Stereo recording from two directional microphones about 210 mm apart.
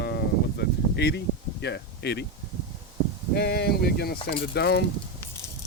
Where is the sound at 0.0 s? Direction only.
50° left (ahead or behind).